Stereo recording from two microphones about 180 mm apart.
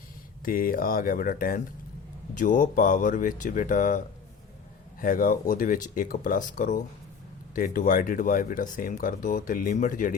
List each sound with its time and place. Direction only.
0.4 s speech: 50° left (ahead or behind)